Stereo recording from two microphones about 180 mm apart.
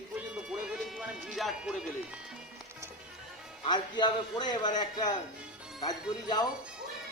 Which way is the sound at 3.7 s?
25° left (ahead or behind).